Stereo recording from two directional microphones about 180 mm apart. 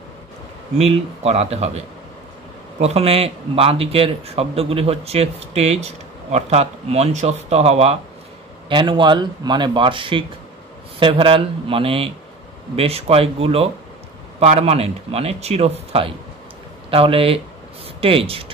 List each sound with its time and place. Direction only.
0.7 s a man's voice: 35° right (ahead or behind)